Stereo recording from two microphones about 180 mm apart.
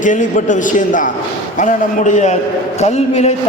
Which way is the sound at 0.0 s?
45° left (ahead or behind).